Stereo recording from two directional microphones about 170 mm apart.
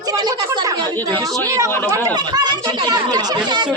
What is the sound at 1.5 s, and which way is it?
Speech, 20° right (ahead or behind).